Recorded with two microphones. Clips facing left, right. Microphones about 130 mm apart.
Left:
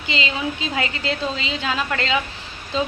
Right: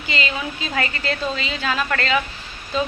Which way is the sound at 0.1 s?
20° left (ahead or behind).